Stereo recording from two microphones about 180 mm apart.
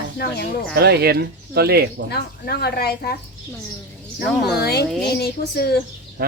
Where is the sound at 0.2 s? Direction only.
60° left (ahead or behind).